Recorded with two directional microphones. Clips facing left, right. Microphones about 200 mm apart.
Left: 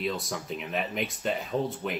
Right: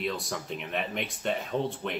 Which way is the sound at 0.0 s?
Centre (ahead or behind).